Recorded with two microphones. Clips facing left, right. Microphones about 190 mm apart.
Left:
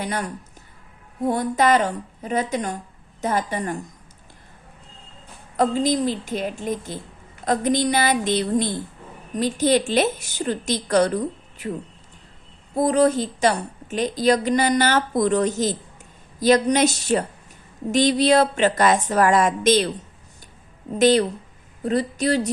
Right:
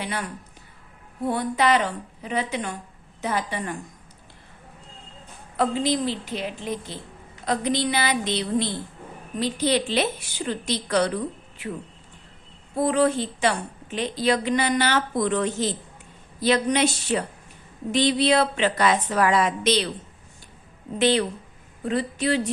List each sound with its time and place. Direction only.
0.0 s a woman's voice: 45° left (ahead or behind)
1.3 s a woman's voice: 45° left (ahead or behind)
5.5 s a woman's voice: 45° left (ahead or behind)
12.7 s a woman's voice: 40° left (ahead or behind)
21.0 s a woman's voice: 40° left (ahead or behind)